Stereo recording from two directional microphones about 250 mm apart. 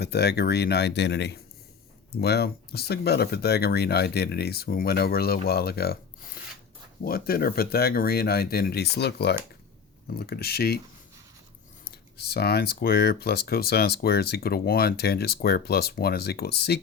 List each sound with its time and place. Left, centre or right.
0.0 s speech: left
7.0 s speech: left
11.9 s speech: left